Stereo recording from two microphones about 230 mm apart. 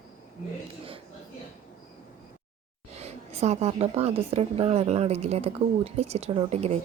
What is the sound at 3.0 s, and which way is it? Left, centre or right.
A woman's voice, right.